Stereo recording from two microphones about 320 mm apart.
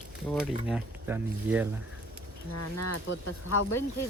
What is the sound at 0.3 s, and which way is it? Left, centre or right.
Speech, centre.